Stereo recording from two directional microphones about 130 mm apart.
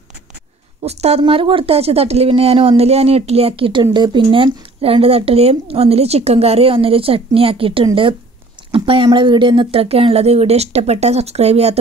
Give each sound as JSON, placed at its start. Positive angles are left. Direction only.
{"t": 0.8, "sound": "speech", "side_deg": -55}